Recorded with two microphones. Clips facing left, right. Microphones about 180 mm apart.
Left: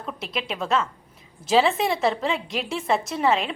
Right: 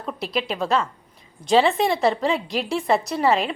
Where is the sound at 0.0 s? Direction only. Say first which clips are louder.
Right 4 dB; centre (ahead or behind).